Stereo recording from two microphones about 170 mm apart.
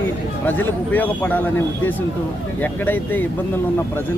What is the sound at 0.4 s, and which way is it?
Speech, 10° left (ahead or behind).